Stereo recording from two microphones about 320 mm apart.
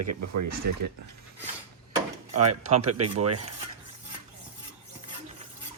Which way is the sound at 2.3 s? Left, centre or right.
Right.